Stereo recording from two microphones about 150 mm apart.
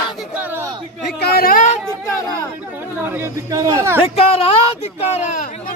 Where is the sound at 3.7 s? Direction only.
15° right (ahead or behind).